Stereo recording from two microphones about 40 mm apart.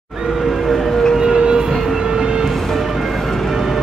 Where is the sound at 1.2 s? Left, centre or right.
Centre.